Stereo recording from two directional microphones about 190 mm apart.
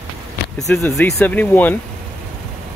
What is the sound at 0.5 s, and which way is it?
Speech, centre (ahead or behind).